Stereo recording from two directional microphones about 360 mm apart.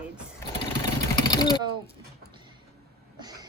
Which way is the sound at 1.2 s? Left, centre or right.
Centre.